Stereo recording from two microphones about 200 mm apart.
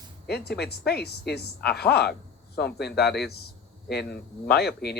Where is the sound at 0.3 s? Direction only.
55° left (ahead or behind).